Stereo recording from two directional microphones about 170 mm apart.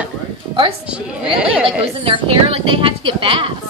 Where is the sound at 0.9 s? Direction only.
5° right (ahead or behind).